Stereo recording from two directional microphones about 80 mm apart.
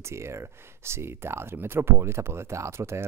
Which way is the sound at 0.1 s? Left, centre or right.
Right.